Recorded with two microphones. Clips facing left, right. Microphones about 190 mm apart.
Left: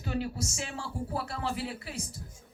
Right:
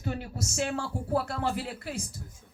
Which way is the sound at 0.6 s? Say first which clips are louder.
Right 6 dB; 60° right (ahead or behind).